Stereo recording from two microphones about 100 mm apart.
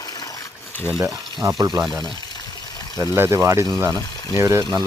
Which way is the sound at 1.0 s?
30° right (ahead or behind).